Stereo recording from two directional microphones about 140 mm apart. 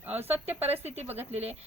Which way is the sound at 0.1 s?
15° right (ahead or behind).